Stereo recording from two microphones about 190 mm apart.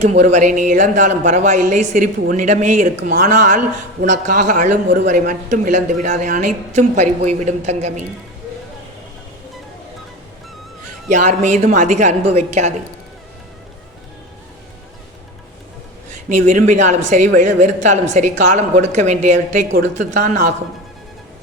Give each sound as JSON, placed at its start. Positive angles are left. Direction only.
{"t": 0.0, "sound": "speech", "side_deg": -35}
{"t": 11.1, "sound": "speech", "side_deg": -40}
{"t": 16.3, "sound": "speech", "side_deg": -40}